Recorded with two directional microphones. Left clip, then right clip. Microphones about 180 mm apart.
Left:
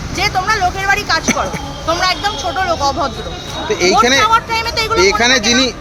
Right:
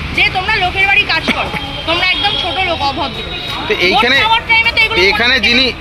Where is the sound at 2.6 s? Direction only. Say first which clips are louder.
Even; 20° left (ahead or behind).